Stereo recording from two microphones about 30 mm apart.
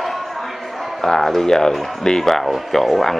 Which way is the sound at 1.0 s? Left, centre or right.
Centre.